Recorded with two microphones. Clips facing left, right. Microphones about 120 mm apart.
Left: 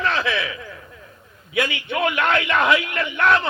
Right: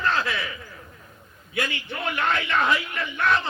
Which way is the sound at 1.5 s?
70° left (ahead or behind).